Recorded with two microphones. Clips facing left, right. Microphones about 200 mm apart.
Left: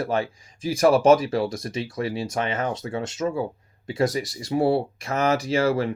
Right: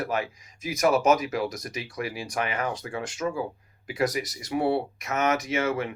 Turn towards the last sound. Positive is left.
turn(degrees=35)  # may be behind; listen again after turning